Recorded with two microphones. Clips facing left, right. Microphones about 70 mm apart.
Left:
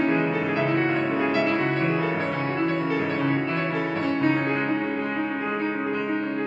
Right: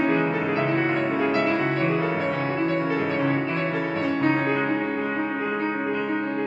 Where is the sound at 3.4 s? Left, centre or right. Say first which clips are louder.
Even; centre.